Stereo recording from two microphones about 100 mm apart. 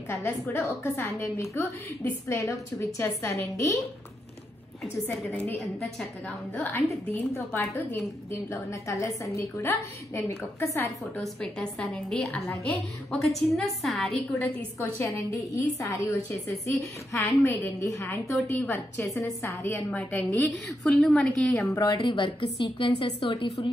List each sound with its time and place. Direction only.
0.1 s a woman's voice: 25° left (ahead or behind)
5.1 s a woman's voice: 10° left (ahead or behind)
6.6 s a woman's voice: 30° left (ahead or behind)
11.1 s a woman's voice: 5° left (ahead or behind)
15.0 s a woman's voice: 30° left (ahead or behind)
19.0 s a woman's voice: 5° left (ahead or behind)
19.4 s a woman's voice: 25° left (ahead or behind)
20.6 s a woman's voice: 5° left (ahead or behind)
21.6 s a woman's voice: 35° left (ahead or behind)
21.9 s a woman's voice: 50° left (ahead or behind); by 23.6 s 65° left (ahead or behind)